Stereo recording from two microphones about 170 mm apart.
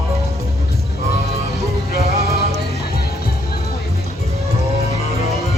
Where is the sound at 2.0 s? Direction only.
35° right (ahead or behind).